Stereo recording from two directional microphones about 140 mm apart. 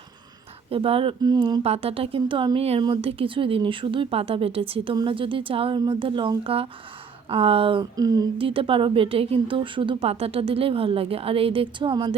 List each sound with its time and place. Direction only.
0.7 s a woman's voice: 40° right (ahead or behind)
1.6 s a woman's voice: 45° right (ahead or behind)
7.9 s a sound: 25° right (ahead or behind)
8.4 s a woman's voice: 40° right (ahead or behind)